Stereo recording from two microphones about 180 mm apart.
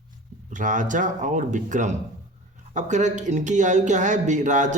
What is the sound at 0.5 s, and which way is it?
Speech, 45° right (ahead or behind).